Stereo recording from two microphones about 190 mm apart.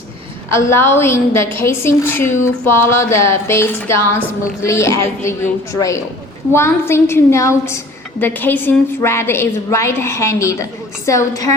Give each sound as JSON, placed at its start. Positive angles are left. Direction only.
{"t": 0.7, "sound": "a woman's voice", "side_deg": 15}